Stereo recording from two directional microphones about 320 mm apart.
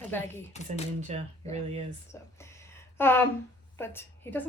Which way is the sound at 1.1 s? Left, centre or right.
Right.